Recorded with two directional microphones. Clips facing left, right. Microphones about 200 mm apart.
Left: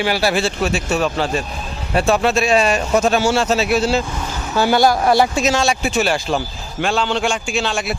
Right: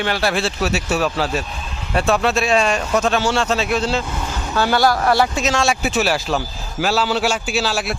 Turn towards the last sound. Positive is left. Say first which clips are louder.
# even
turn(degrees=-5)  # may be behind; listen again after turning